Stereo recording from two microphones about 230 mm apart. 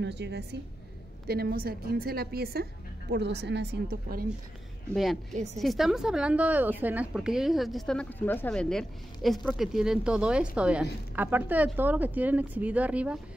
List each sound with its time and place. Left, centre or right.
0.0 s a woman's voice: right
4.9 s a woman's voice: centre
5.3 s a woman's voice: right
5.6 s a woman's voice: centre